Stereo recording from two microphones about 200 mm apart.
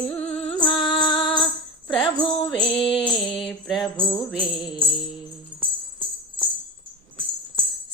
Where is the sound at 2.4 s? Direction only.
25° left (ahead or behind).